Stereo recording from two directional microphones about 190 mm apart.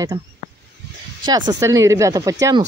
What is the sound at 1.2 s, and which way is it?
Speech, 20° right (ahead or behind).